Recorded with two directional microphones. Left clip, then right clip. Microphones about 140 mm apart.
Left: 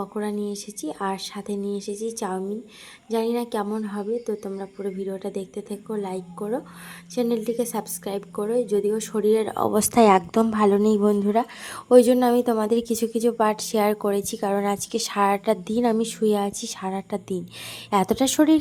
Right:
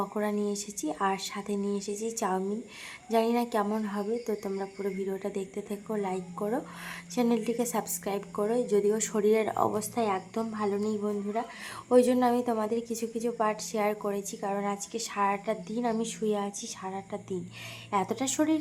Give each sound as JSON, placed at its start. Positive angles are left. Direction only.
{"t": 0.0, "sound": "a woman's voice", "side_deg": 15}
{"t": 10.4, "sound": "a sound", "side_deg": 80}
{"t": 10.8, "sound": "a man's voice", "side_deg": 75}
{"t": 11.9, "sound": "a woman's voice", "side_deg": 35}